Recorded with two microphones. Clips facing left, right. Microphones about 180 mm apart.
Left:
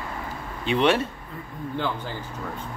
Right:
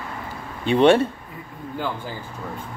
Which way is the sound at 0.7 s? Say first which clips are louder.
Right 6 dB; 30° right (ahead or behind).